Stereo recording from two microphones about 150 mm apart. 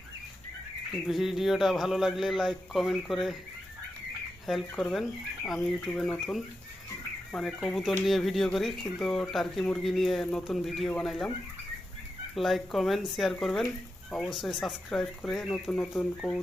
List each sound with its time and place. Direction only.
1.0 s speech: centre (ahead or behind)
4.4 s speech: 5° left (ahead or behind)
12.3 s speech: centre (ahead or behind)